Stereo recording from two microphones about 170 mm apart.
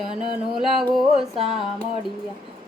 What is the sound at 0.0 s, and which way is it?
Music, 30° left (ahead or behind).